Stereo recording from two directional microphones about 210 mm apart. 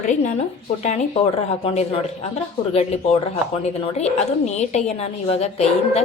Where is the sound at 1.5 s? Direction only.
30° left (ahead or behind).